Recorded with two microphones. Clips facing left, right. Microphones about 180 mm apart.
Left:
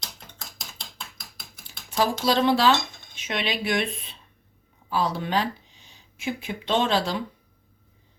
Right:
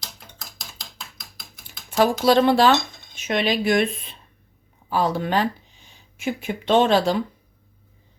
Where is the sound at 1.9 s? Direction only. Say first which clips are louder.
Right 6 dB; 55° right (ahead or behind).